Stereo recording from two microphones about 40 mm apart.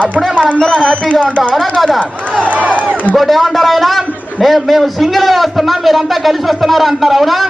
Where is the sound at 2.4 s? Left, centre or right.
Right.